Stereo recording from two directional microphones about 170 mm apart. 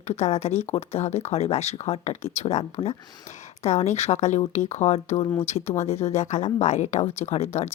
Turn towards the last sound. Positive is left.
turn(degrees=40)  # may be behind; listen again after turning